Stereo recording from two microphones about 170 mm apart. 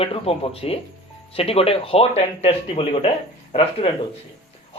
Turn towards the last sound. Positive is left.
turn(degrees=35)  # may be behind; listen again after turning